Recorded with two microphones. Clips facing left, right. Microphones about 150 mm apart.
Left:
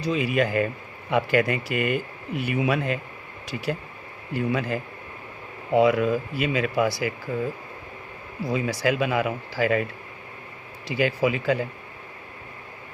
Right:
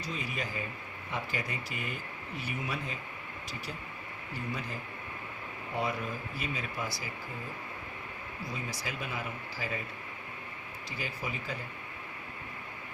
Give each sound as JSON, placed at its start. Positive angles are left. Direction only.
{"t": 0.0, "sound": "speech", "side_deg": 75}
{"t": 8.4, "sound": "speech", "side_deg": 85}
{"t": 10.8, "sound": "speech", "side_deg": 80}